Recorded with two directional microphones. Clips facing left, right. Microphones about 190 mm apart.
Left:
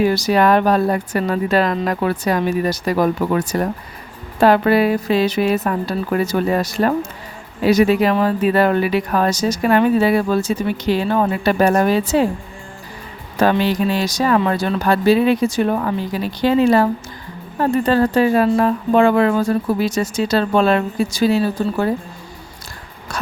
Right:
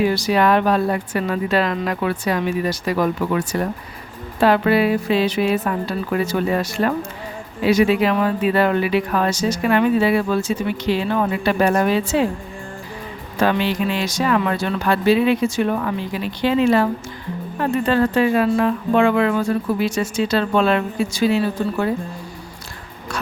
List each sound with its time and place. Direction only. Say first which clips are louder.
0.0 s speech: left 2 dB; 45° left (ahead or behind)
13.4 s speech: left 3 dB; 40° left (ahead or behind)